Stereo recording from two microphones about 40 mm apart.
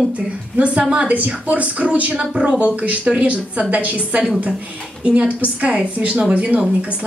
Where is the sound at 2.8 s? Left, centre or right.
Right.